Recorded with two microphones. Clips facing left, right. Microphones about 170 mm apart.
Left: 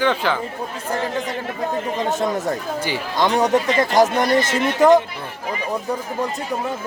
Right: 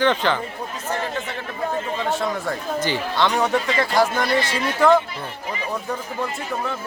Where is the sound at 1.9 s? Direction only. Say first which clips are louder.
Left 3 dB; 20° left (ahead or behind).